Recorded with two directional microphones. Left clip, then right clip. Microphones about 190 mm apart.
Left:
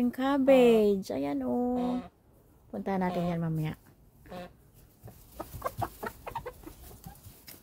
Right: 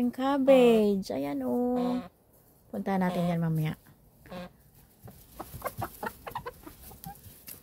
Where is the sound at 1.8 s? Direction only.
60° right (ahead or behind).